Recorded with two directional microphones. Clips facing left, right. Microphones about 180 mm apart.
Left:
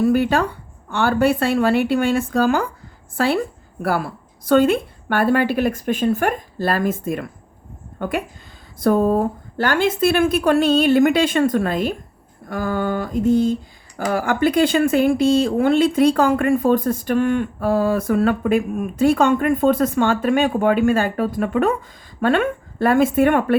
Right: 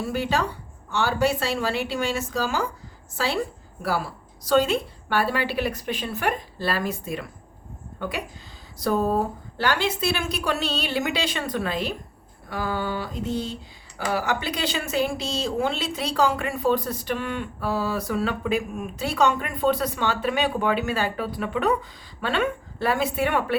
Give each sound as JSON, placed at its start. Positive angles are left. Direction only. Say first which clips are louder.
{"t": 0.0, "sound": "a woman's voice", "louder": "left 8 dB", "side_deg": 55}